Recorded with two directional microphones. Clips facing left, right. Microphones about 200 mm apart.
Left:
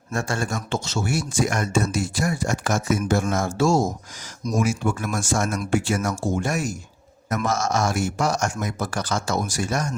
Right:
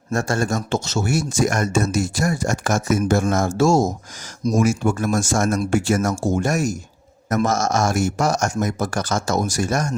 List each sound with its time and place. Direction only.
0.1 s speech: 40° right (ahead or behind)